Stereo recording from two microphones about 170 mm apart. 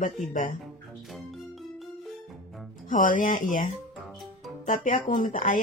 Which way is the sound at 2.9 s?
50° left (ahead or behind).